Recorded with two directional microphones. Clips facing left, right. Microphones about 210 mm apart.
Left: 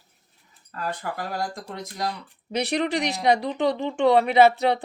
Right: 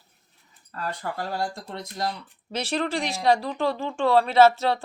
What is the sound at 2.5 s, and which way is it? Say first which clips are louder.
Speech: left 3 dB; 15° left (ahead or behind).